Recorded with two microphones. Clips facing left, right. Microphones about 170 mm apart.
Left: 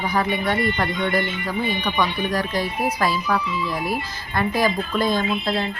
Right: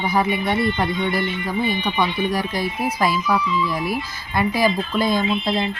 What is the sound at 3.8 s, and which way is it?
Speech, 40° left (ahead or behind).